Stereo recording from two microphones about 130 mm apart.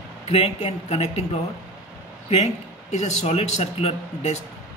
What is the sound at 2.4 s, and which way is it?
A man's voice, 60° left (ahead or behind).